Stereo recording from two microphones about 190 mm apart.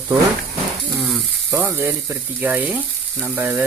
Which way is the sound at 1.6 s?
15° right (ahead or behind).